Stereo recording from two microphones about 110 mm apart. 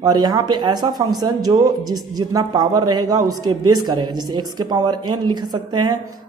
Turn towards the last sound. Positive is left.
turn(degrees=-40)  # may be behind; listen again after turning